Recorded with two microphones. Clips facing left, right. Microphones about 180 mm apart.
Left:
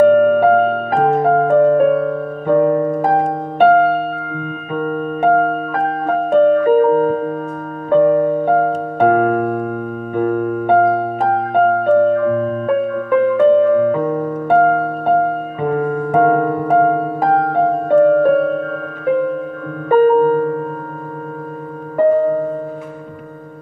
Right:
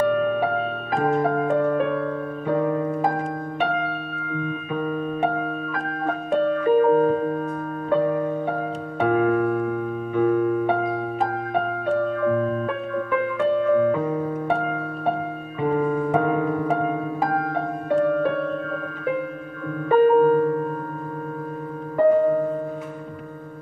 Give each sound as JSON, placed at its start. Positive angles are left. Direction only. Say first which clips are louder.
{"t": 0.0, "sound": "music", "louder": "left 11 dB", "side_deg": 50}
{"t": 4.7, "sound": "keyboard", "louder": "left 6 dB", "side_deg": 50}
{"t": 6.3, "sound": "music", "louder": "left 8 dB", "side_deg": 55}
{"t": 19.9, "sound": "music", "louder": "left 4 dB", "side_deg": 45}